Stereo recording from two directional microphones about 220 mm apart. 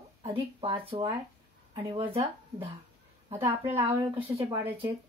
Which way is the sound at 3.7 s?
25° right (ahead or behind).